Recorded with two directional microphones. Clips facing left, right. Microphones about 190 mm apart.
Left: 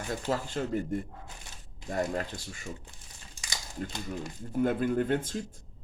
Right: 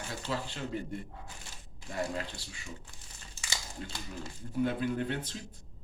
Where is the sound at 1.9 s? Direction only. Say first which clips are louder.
Left 4 dB; 45° left (ahead or behind).